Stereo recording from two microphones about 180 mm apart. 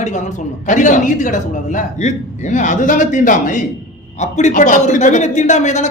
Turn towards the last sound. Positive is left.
turn(degrees=40)  # may be behind; listen again after turning